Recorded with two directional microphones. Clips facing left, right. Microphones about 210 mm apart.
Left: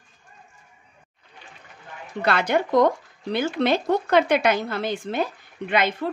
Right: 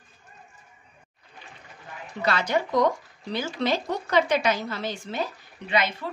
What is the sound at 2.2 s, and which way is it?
A woman's voice, 60° left (ahead or behind).